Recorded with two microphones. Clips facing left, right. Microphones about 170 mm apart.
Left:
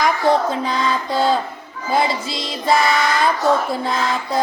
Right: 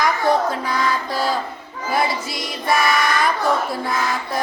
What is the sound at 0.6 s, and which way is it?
Child singing, 25° left (ahead or behind).